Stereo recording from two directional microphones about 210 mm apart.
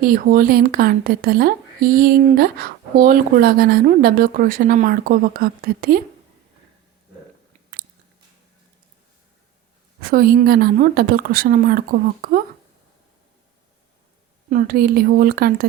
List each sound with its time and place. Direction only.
0.0 s a woman's voice: 45° right (ahead or behind)
10.0 s a woman's voice: 45° right (ahead or behind)
14.5 s a woman's voice: 45° right (ahead or behind)